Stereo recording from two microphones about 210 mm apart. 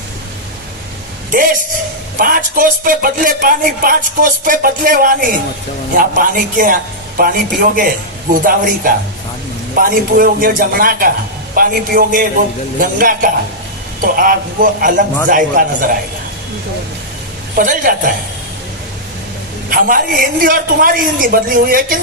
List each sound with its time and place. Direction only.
1.3 s speech: 40° right (ahead or behind)
17.5 s speech: 40° right (ahead or behind)
19.7 s speech: 40° right (ahead or behind)